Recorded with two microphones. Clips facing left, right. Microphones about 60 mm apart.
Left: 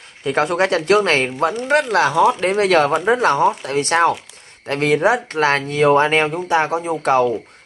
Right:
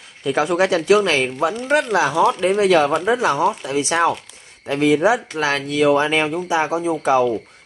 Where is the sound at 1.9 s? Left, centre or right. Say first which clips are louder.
Left 3 dB; left.